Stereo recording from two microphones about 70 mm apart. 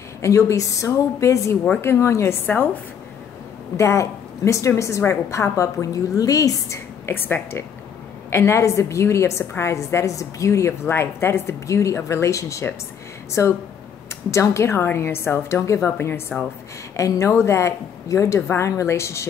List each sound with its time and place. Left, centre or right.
0.2 s a woman's voice: left
2.4 s a woman's voice: left
3.7 s a woman's voice: left
7.1 s a woman's voice: left
10.9 s a woman's voice: left
16.0 s a woman's voice: left
16.9 s a woman's voice: left
17.3 s a woman's voice: left